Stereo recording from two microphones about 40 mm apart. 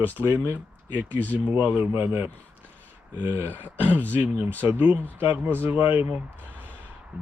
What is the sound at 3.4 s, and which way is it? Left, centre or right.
Speech, right.